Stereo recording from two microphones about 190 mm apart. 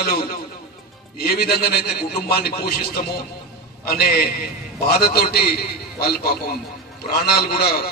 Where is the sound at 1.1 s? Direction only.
55° left (ahead or behind).